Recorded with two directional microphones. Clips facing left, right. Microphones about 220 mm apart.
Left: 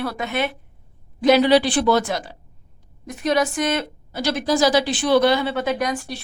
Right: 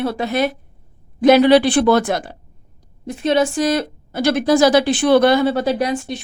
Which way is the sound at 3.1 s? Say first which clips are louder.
Right 4 dB; 30° right (ahead or behind).